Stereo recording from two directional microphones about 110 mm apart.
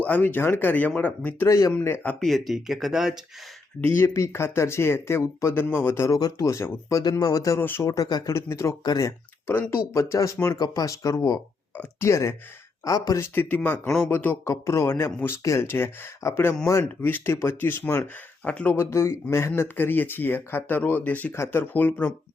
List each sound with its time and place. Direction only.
0.0 s speech: 15° left (ahead or behind)
1.5 s speech: 30° left (ahead or behind)
2.2 s speech: centre (ahead or behind)
3.8 s speech: 20° left (ahead or behind)
7.6 s speech: 20° left (ahead or behind)
7.9 s speech: 35° left (ahead or behind)
8.3 s speech: 25° left (ahead or behind)
13.5 s speech: 15° left (ahead or behind)
14.4 s speech: 25° left (ahead or behind)